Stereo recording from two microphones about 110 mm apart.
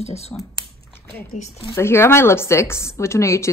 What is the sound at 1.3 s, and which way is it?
Speech, 90° left.